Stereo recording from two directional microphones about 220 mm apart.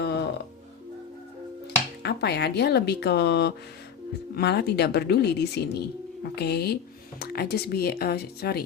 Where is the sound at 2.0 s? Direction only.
50° left (ahead or behind).